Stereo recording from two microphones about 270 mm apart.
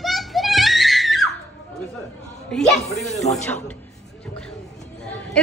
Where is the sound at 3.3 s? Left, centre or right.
Left.